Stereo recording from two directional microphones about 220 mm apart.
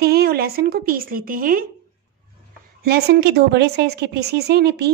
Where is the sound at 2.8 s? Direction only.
45° right (ahead or behind).